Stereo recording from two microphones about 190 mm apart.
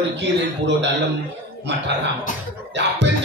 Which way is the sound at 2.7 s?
65° right (ahead or behind).